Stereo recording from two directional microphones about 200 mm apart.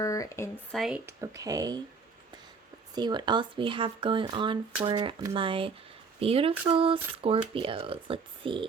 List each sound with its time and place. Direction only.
0.0 s speech: 15° left (ahead or behind)
0.7 s speech: centre (ahead or behind); by 1.8 s 20° right (ahead or behind)
2.9 s speech: 20° right (ahead or behind)